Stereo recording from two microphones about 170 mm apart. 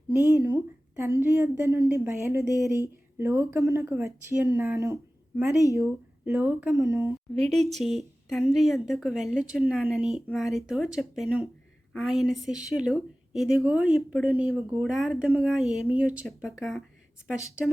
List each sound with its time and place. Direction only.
0.1 s a woman's voice: 15° right (ahead or behind)
6.2 s a woman's voice: 10° right (ahead or behind)
7.3 s a woman's voice: centre (ahead or behind)